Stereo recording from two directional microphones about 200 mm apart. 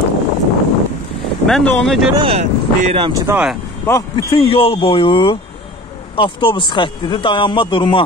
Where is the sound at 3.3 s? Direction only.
5° right (ahead or behind).